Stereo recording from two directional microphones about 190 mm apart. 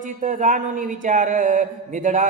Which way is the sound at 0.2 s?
45° right (ahead or behind).